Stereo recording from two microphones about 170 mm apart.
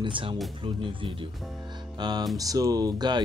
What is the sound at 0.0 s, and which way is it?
Speech, 30° right (ahead or behind).